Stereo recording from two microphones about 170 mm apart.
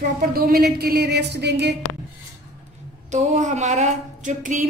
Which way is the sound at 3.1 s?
45° right (ahead or behind).